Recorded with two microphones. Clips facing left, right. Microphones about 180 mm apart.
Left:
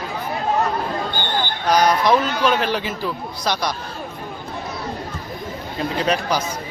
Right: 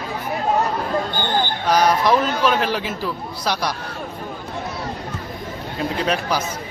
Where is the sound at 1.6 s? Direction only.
5° right (ahead or behind).